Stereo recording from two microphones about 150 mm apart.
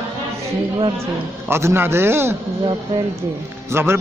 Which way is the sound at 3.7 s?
15° right (ahead or behind).